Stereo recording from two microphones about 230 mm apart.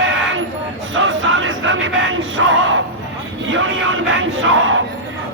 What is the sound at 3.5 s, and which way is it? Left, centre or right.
Crowd, right.